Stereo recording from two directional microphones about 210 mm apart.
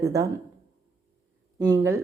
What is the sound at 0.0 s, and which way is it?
Speech, 15° right (ahead or behind).